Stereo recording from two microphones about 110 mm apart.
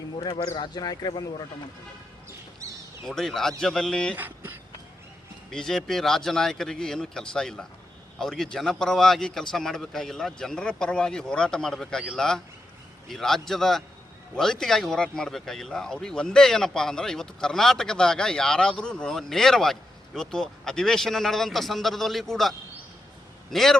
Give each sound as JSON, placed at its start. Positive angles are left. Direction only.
{"t": 0.2, "sound": "speech", "side_deg": 40}
{"t": 3.1, "sound": "a man's voice", "side_deg": 5}
{"t": 4.1, "sound": "speech", "side_deg": -15}
{"t": 5.5, "sound": "a man's voice", "side_deg": 5}